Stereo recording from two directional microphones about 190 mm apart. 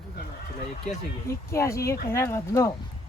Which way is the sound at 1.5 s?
15° left (ahead or behind).